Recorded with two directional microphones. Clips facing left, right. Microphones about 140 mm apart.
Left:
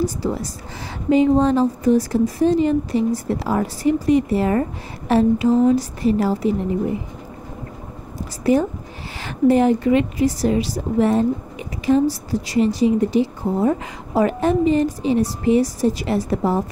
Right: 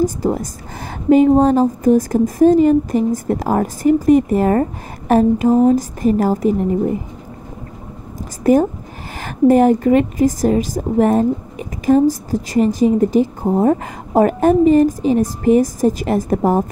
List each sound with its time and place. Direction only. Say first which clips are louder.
0.0 s a woman's voice: right 5 dB; 45° right (ahead or behind)
8.5 s a woman's voice: right 4 dB; 45° right (ahead or behind)